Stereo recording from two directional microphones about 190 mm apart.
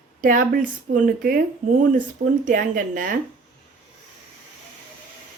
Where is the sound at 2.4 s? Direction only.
45° right (ahead or behind).